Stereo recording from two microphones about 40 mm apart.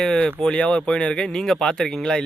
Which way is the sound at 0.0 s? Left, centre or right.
Centre.